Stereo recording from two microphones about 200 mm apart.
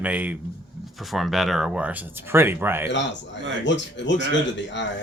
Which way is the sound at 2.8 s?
65° left (ahead or behind).